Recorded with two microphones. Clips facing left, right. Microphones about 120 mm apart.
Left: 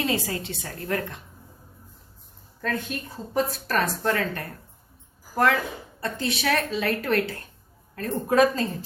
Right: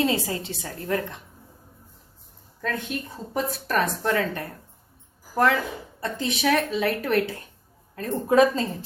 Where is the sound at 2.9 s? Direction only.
15° right (ahead or behind).